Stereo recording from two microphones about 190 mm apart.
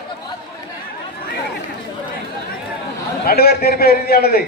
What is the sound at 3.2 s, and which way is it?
A man's voice, 55° left (ahead or behind).